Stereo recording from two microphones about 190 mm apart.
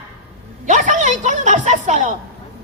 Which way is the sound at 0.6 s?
40° right (ahead or behind).